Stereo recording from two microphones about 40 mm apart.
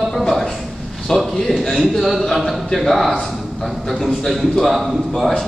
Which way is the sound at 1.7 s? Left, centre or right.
Centre.